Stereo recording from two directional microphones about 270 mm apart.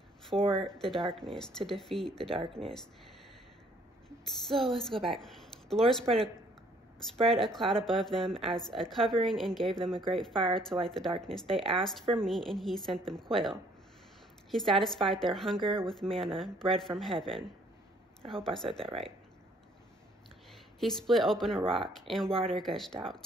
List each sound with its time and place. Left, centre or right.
0.4 s speech: centre
0.7 s a woman's voice: centre
4.5 s a woman's voice: centre
7.2 s a woman's voice: centre
14.5 s a woman's voice: centre
15.6 s speech: centre
15.9 s a woman's voice: centre
18.3 s a woman's voice: centre
18.7 s speech: right
20.8 s a woman's voice: centre
21.5 s speech: centre
22.0 s a woman's voice: centre
22.3 s speech: centre
22.6 s a woman's voice: centre